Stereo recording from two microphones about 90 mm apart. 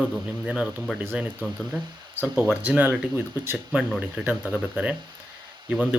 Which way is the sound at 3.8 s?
Centre (ahead or behind).